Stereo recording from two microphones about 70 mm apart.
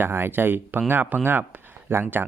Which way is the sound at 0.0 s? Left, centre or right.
Right.